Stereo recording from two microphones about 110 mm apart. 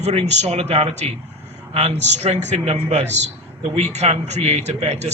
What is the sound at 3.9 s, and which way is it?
Speech, 85° right.